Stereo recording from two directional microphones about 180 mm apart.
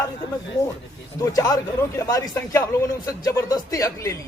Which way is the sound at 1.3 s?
20° left (ahead or behind).